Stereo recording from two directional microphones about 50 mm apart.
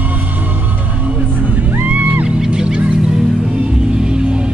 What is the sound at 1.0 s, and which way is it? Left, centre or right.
Music, right.